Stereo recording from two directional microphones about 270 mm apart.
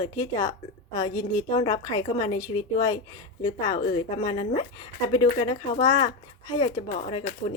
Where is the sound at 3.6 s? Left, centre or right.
Left.